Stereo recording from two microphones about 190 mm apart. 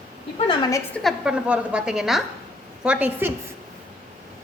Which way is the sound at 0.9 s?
Centre (ahead or behind).